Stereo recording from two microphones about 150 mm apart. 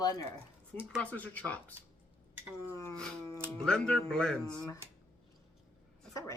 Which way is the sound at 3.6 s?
5° left (ahead or behind).